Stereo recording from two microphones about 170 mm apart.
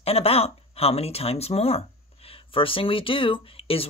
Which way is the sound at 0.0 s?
35° left (ahead or behind).